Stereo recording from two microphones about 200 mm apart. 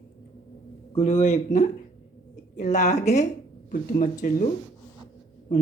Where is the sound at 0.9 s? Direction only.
35° left (ahead or behind).